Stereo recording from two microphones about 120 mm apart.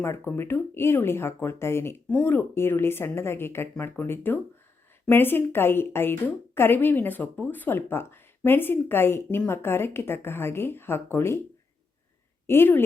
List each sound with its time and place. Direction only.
0.3 s a woman's voice: 20° left (ahead or behind)
12.5 s a woman's voice: 20° left (ahead or behind)